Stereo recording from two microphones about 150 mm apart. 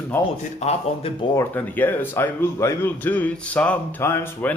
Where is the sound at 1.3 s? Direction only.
15° left (ahead or behind).